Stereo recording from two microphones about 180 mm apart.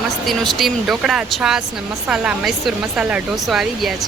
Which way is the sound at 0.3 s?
Centre (ahead or behind).